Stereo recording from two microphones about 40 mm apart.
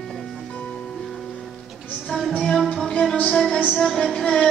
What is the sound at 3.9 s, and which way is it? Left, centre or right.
Female singing, centre.